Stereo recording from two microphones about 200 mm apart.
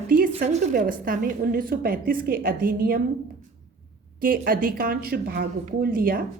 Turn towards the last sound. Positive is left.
turn(degrees=-45)  # may be behind; listen again after turning